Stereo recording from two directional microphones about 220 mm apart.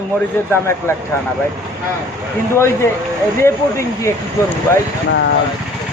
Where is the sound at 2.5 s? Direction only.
10° left (ahead or behind).